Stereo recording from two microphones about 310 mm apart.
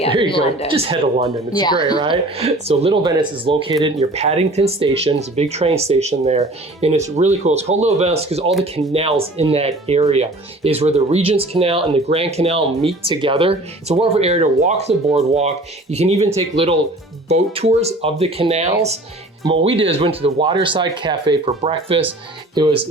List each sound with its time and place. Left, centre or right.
0.3 s speech: centre
0.7 s speech: centre
1.5 s speech: centre
2.0 s speech: centre